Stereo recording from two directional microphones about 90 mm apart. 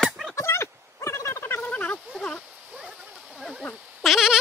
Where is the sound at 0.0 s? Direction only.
Centre (ahead or behind).